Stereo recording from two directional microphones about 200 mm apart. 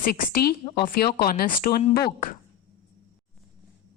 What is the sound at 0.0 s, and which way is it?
A woman's voice, 50° left (ahead or behind).